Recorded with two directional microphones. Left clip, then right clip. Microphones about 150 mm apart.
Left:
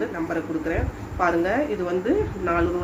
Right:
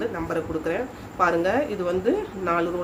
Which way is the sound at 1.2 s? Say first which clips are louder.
Even; 30° right (ahead or behind).